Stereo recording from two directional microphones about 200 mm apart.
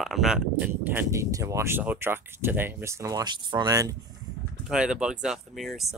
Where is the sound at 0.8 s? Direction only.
10° right (ahead or behind).